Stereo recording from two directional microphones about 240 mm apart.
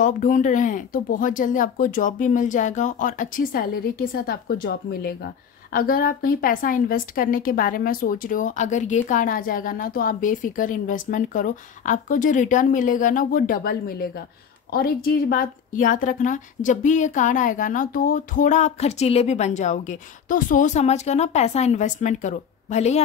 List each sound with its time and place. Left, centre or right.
0.0 s a woman's voice: left